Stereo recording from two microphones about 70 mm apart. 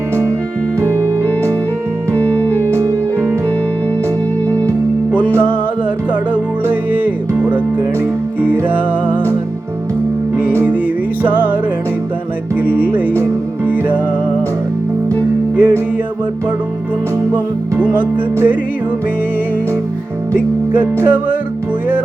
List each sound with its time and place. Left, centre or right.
0.8 s music: right
2.1 s music: left
6.3 s music: right
10.3 s music: right
12.5 s music: right
15.5 s music: right
17.3 s music: right
21.0 s music: right